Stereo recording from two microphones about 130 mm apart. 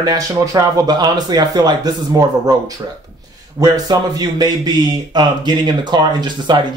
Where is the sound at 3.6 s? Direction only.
30° right (ahead or behind).